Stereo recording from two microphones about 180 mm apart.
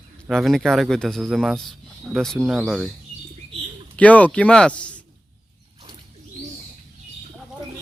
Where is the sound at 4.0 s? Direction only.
10° left (ahead or behind).